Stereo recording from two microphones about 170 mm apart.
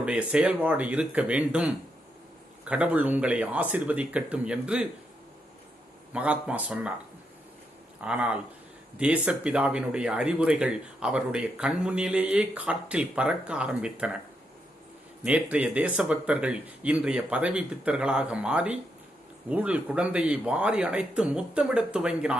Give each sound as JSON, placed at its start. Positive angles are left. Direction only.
{"t": 0.0, "sound": "speech", "side_deg": -5}
{"t": 6.1, "sound": "speech", "side_deg": -10}
{"t": 8.0, "sound": "speech", "side_deg": -5}
{"t": 15.2, "sound": "speech", "side_deg": -10}